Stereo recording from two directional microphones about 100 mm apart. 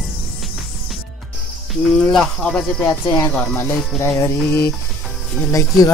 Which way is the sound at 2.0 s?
5° left (ahead or behind).